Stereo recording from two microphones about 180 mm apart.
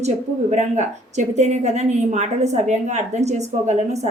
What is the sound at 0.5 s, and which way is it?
A woman's voice, 40° right (ahead or behind).